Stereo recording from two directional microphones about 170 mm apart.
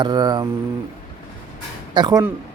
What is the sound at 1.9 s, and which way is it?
Speech, 25° right (ahead or behind).